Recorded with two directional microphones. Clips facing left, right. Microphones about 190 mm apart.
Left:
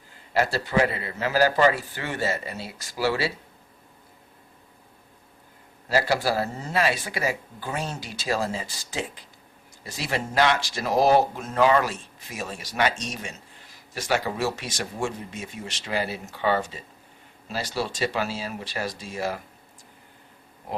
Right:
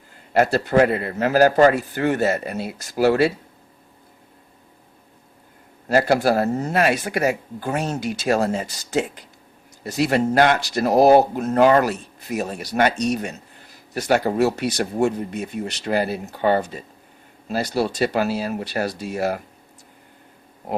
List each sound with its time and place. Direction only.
0.3 s a man's voice: 55° right (ahead or behind)
5.9 s a man's voice: 50° right (ahead or behind)
6.7 s a man's voice: 60° right (ahead or behind)
9.8 s speech: 65° right (ahead or behind)
10.1 s a man's voice: 50° right (ahead or behind)